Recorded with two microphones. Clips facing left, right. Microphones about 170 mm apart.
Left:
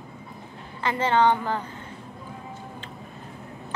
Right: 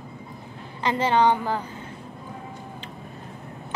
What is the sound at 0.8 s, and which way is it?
Speech, 15° right (ahead or behind).